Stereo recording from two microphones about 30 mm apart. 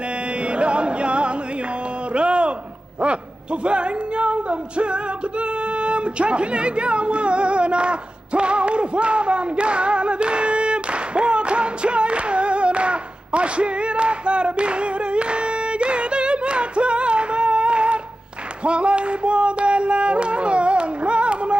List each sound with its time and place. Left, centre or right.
0.5 s music: right
2.1 s a sound: right
3.6 s music: right